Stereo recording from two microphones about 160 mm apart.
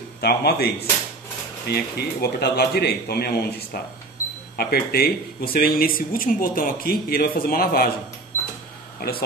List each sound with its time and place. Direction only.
0.2 s speech: 80° left
1.7 s speech: 85° left; by 7.9 s 70° left (ahead or behind)